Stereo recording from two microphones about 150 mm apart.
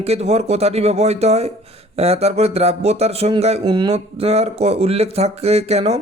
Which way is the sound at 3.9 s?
40° right (ahead or behind).